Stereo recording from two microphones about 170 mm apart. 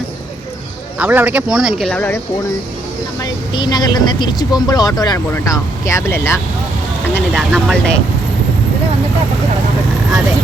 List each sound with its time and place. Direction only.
0.9 s speech: 10° right (ahead or behind); by 2.2 s 10° left (ahead or behind)
3.5 s speech: 25° left (ahead or behind)
7.3 s speech: centre (ahead or behind)